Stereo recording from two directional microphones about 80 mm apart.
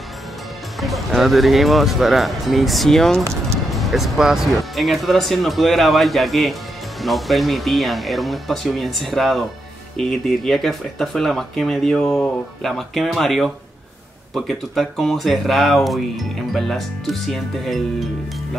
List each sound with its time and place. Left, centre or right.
0.7 s speech: centre